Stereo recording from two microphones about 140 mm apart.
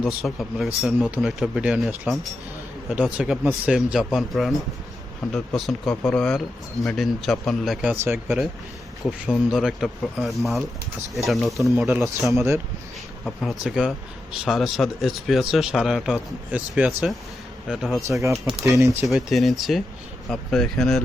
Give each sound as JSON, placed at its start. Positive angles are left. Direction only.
{"t": 0.2, "sound": "speech", "side_deg": 0}
{"t": 5.5, "sound": "speech", "side_deg": 0}
{"t": 9.5, "sound": "speech", "side_deg": 0}
{"t": 12.3, "sound": "speech", "side_deg": -20}
{"t": 13.2, "sound": "speech", "side_deg": 0}
{"t": 18.1, "sound": "speech", "side_deg": -20}
{"t": 19.0, "sound": "speech", "side_deg": 0}